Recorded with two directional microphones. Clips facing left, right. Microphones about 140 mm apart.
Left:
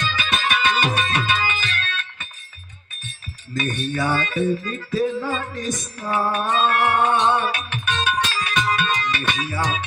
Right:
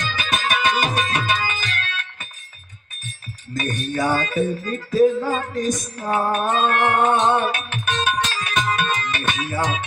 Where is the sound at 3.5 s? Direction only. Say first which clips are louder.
Even; 45° right (ahead or behind).